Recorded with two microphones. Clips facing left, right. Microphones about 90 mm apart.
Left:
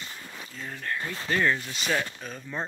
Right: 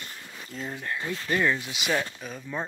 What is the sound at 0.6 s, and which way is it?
Speech, 15° right (ahead or behind).